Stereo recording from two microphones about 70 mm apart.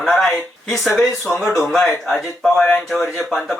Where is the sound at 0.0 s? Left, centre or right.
Centre.